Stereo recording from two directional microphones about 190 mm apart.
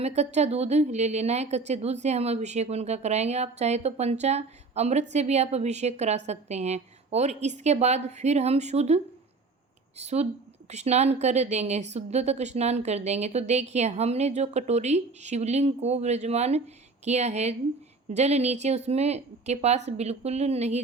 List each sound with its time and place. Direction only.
0.0 s a woman's voice: 35° right (ahead or behind)
10.0 s a woman's voice: 35° right (ahead or behind)